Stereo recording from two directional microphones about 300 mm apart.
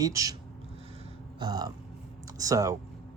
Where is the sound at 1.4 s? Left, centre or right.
Centre.